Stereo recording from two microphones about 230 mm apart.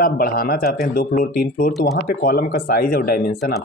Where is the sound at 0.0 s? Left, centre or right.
Left.